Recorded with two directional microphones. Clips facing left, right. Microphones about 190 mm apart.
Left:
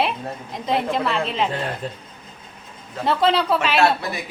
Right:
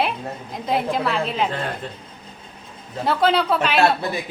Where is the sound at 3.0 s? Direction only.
Centre (ahead or behind).